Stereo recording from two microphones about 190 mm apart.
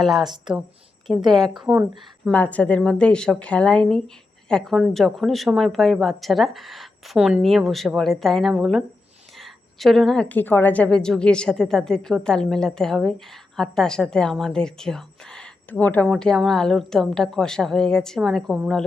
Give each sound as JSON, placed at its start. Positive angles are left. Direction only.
{"t": 0.0, "sound": "a woman's voice", "side_deg": 0}
{"t": 1.1, "sound": "speech", "side_deg": -20}
{"t": 1.5, "sound": "a woman's voice", "side_deg": -5}
{"t": 2.3, "sound": "a woman's voice", "side_deg": 10}